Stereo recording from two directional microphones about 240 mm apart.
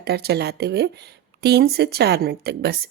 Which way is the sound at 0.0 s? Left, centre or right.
Right.